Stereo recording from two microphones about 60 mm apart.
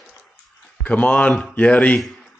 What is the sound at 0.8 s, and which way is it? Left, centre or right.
Speech, left.